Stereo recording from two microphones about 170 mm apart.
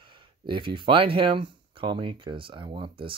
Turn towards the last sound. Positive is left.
turn(degrees=-30)  # may be behind; listen again after turning